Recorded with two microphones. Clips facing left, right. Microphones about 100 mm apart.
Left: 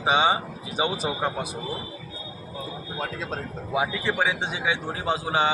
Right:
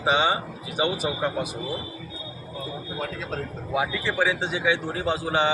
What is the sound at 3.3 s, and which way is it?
Speech, 15° left (ahead or behind).